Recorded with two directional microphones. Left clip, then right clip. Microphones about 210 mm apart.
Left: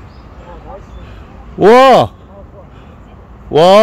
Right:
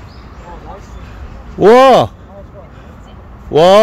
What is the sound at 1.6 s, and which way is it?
Speech, 20° left (ahead or behind).